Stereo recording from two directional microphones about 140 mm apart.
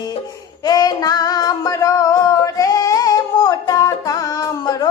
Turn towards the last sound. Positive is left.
turn(degrees=25)  # may be behind; listen again after turning